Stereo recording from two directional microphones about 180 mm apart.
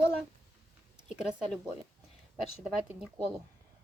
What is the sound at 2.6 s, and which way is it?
Speech, 5° right (ahead or behind).